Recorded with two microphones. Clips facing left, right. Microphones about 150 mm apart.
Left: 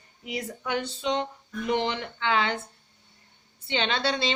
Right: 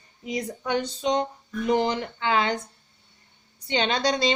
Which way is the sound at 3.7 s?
40° right (ahead or behind).